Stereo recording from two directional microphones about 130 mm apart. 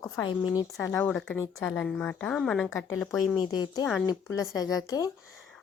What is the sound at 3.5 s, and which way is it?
A woman's voice, 30° left (ahead or behind).